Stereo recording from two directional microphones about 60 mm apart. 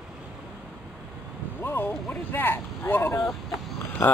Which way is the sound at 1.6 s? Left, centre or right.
Left.